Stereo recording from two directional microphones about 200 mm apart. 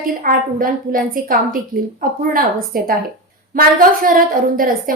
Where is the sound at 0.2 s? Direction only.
45° right (ahead or behind).